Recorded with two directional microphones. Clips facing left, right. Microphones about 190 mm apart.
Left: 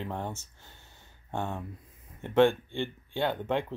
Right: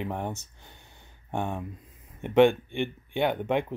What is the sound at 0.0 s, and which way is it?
Speech, 15° right (ahead or behind).